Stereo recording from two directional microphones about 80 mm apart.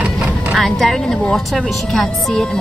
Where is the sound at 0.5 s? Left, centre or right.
Centre.